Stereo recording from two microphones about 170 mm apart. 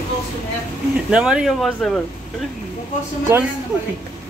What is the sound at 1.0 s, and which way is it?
Speech, 5° right (ahead or behind).